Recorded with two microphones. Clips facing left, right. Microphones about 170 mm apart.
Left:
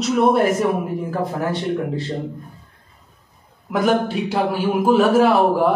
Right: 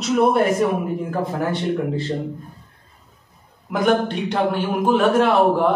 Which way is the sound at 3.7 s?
5° left (ahead or behind).